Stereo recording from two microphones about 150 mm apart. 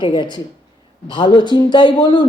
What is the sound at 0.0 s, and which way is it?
Speech, 30° left (ahead or behind).